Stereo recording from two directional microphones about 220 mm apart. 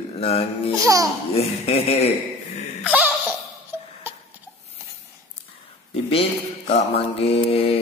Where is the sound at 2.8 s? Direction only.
5° right (ahead or behind).